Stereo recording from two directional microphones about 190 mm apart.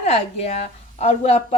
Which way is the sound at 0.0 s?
35° left (ahead or behind).